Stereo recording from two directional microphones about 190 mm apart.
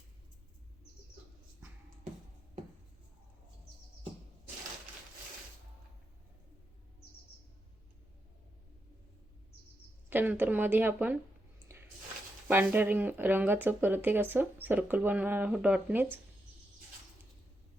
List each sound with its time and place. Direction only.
10.1 s speech: 10° right (ahead or behind)
11.7 s a sound: 15° right (ahead or behind)
12.5 s speech: 10° right (ahead or behind)